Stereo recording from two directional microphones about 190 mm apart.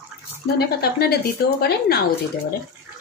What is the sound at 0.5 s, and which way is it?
A woman's voice, 60° left (ahead or behind).